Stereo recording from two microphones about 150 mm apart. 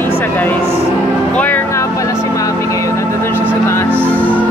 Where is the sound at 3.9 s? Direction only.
15° right (ahead or behind).